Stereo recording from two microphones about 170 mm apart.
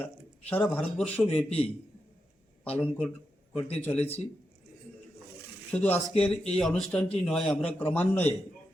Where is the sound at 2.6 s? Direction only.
10° left (ahead or behind).